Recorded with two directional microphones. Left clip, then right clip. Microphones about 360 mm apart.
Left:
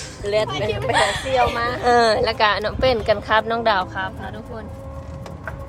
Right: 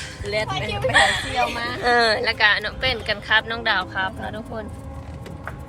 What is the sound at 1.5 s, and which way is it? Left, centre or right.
Speech, left.